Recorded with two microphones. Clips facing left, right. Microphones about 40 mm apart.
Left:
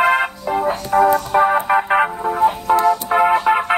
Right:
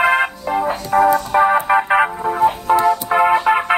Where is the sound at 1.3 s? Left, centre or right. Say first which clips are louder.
Right 1 dB; centre.